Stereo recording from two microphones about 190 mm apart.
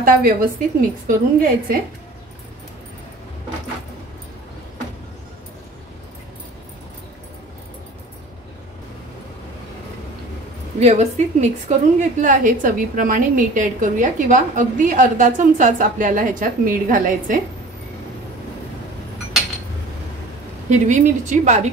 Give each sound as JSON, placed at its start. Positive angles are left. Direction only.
{"t": 0.0, "sound": "a woman's voice", "side_deg": -50}
{"t": 10.8, "sound": "a woman's voice", "side_deg": -35}
{"t": 20.7, "sound": "speech", "side_deg": -40}